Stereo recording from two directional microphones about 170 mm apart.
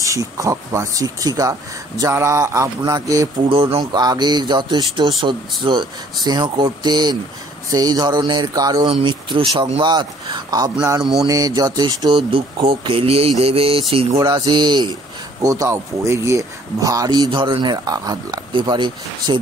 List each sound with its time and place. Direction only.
0.0 s speech: 20° right (ahead or behind)
11.0 s mantra: centre (ahead or behind)
11.2 s speech: 20° right (ahead or behind)
13.4 s mantra: 35° right (ahead or behind)
14.1 s speech: 25° right (ahead or behind)